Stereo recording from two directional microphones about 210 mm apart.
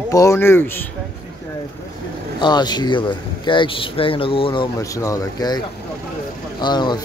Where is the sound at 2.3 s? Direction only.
20° left (ahead or behind).